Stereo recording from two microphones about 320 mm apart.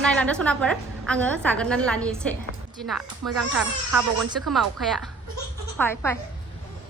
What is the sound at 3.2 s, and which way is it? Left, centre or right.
Speech, right.